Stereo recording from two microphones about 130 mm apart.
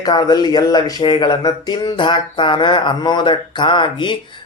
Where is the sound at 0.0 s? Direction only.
30° left (ahead or behind).